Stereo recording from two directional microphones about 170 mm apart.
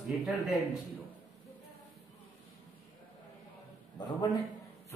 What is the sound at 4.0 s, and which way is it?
Speech, 25° left (ahead or behind).